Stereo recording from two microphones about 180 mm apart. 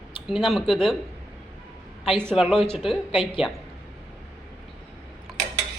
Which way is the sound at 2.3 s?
Centre (ahead or behind).